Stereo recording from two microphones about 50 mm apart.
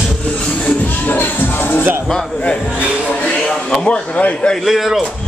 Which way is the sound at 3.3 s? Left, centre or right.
Centre.